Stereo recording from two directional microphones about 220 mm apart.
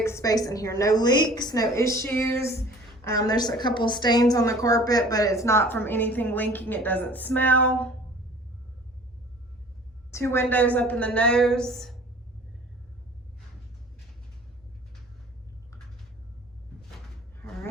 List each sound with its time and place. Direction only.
0.0 s a woman's voice: 15° left (ahead or behind)
10.1 s a woman's voice: 10° left (ahead or behind)
17.3 s a sound: 5° left (ahead or behind)